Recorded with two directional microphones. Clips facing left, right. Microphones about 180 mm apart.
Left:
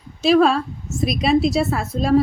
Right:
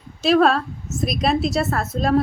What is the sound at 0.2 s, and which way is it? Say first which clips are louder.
A woman's voice: left 1 dB; centre (ahead or behind).